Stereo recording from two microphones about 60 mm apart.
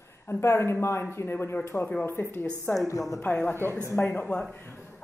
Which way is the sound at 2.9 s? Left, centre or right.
Left.